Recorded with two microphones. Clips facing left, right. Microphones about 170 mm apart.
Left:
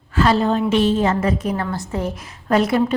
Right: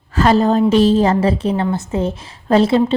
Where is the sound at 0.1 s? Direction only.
40° right (ahead or behind).